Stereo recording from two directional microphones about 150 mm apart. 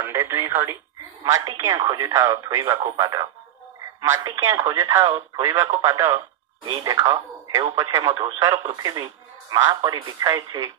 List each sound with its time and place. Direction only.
0.0 s speech: 15° right (ahead or behind)
6.6 s speech: 35° right (ahead or behind)